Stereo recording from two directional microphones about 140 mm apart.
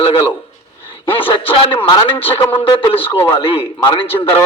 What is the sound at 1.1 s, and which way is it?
A man's voice, 40° left (ahead or behind).